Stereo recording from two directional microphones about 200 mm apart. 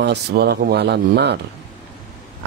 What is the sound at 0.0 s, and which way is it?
Speech, 55° right (ahead or behind).